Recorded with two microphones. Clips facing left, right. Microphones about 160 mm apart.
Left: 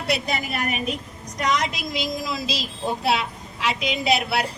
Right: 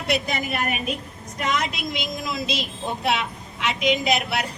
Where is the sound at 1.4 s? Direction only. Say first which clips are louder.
Left 2 dB; 35° left (ahead or behind).